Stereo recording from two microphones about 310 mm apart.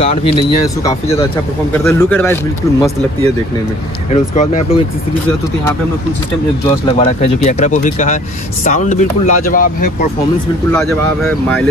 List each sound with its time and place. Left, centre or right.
0.3 s speech: centre
4.1 s speech: left
6.9 s speech: centre
10.7 s speech: centre